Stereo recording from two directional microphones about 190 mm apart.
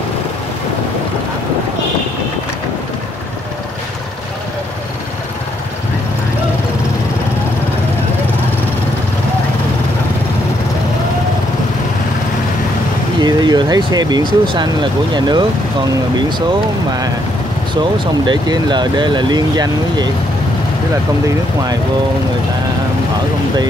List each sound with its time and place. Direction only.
13.2 s speech: 20° right (ahead or behind)
18.2 s speech: 25° right (ahead or behind)